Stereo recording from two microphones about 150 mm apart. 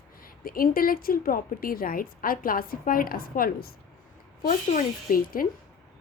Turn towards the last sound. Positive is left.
turn(degrees=70)  # may be behind; listen again after turning